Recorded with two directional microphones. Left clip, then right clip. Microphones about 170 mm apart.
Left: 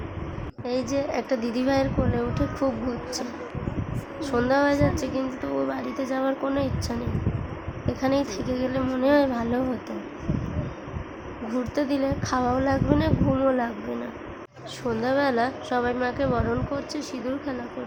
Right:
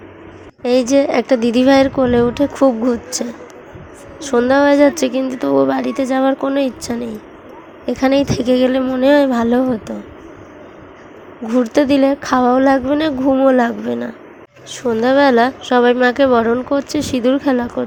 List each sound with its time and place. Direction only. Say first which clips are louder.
0.6 s a woman's voice: right 14 dB; 45° right (ahead or behind)
11.4 s speech: right 13 dB; 40° right (ahead or behind)